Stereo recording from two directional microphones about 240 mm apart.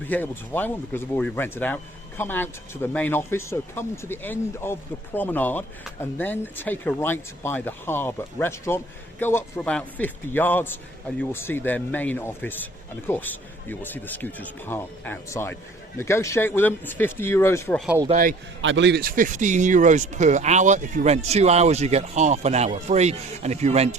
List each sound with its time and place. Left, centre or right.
0.1 s speech: centre
17.7 s speech: centre
18.1 s speech: right
18.6 s speech: right